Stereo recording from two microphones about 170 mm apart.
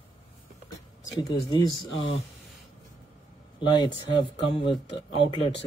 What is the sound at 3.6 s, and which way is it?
Speech, 30° left (ahead or behind).